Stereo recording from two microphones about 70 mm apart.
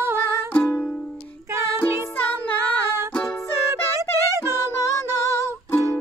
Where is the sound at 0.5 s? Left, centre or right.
Left.